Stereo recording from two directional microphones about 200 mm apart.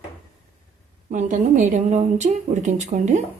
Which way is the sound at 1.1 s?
40° right (ahead or behind).